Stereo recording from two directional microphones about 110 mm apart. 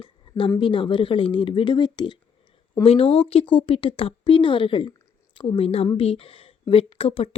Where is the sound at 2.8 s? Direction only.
60° left (ahead or behind).